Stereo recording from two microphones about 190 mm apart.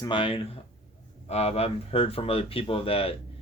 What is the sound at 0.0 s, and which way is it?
Speech, 25° left (ahead or behind).